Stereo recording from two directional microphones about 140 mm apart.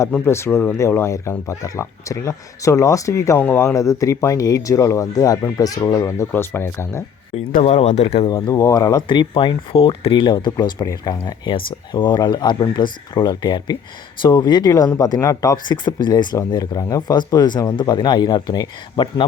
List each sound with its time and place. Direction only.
0.3 s speech: 20° left (ahead or behind)
7.6 s speech: 50° left (ahead or behind)
8.5 s speech: 25° left (ahead or behind)